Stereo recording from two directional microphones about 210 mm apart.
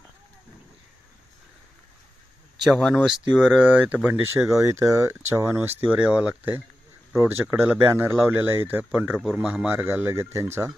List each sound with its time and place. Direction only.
2.6 s speech: centre (ahead or behind); by 10.7 s 15° right (ahead or behind)